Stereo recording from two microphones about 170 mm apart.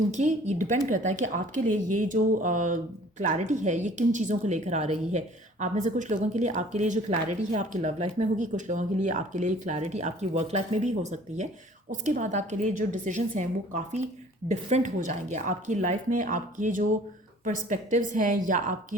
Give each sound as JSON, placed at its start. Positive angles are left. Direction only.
{"t": 0.2, "sound": "speech", "side_deg": -45}